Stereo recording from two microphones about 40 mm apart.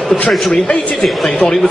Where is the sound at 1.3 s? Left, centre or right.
Left.